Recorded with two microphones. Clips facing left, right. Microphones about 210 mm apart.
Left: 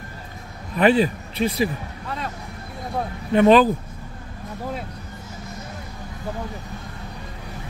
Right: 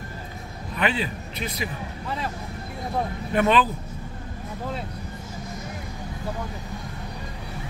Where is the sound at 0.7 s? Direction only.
40° left (ahead or behind).